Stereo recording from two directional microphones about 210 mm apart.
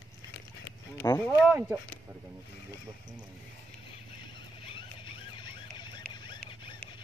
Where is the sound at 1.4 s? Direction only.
5° right (ahead or behind).